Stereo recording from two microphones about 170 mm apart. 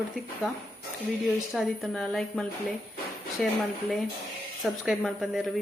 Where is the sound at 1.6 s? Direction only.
Centre (ahead or behind).